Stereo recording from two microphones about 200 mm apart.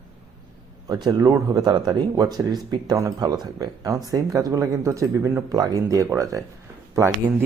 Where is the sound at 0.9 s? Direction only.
20° right (ahead or behind).